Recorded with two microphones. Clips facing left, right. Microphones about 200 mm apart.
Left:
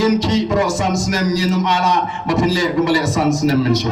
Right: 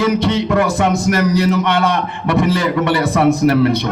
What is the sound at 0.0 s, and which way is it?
Music, 60° right (ahead or behind).